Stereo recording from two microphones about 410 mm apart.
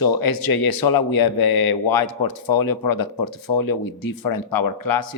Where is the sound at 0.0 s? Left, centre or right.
Left.